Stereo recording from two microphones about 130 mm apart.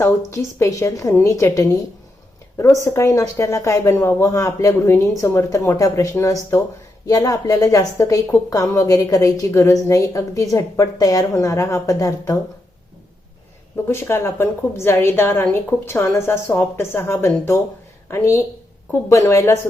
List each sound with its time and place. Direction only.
0.0 s a woman's voice: 20° left (ahead or behind)
13.8 s a woman's voice: 20° left (ahead or behind)